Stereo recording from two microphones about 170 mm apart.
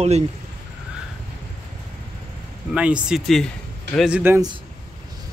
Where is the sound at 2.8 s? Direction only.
5° right (ahead or behind).